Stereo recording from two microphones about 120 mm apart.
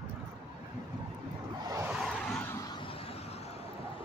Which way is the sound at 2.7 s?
45° left (ahead or behind).